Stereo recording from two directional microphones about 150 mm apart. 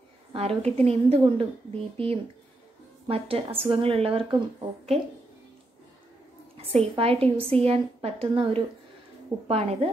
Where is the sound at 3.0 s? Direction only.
40° right (ahead or behind).